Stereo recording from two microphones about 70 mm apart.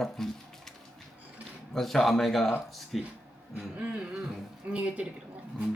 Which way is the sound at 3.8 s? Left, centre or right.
Centre.